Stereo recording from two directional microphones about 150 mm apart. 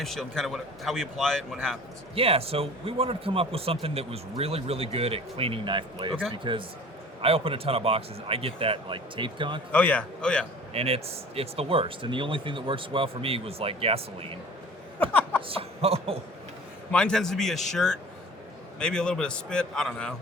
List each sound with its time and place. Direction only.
0.0 s a man's voice: centre (ahead or behind)
2.1 s speech: 40° right (ahead or behind)
9.7 s a man's voice: 10° left (ahead or behind)
10.8 s speech: 40° right (ahead or behind)
15.4 s speech: 40° right (ahead or behind)
16.9 s a man's voice: 5° left (ahead or behind)